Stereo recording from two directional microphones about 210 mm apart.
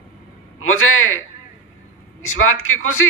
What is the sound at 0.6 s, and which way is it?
A man's voice, 75° left (ahead or behind).